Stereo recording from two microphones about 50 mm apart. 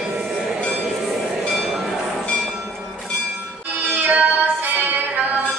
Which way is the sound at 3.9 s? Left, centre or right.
Right.